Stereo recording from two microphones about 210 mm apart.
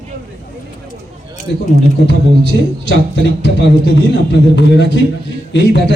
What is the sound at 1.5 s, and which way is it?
Speech, 55° left (ahead or behind).